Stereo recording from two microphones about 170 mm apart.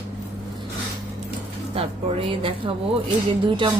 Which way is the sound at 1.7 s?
35° right (ahead or behind).